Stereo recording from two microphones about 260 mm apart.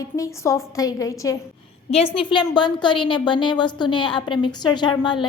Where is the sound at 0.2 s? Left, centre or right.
Centre.